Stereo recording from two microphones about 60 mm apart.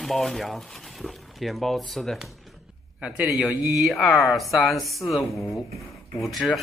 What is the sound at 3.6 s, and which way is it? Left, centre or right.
A man's voice, centre.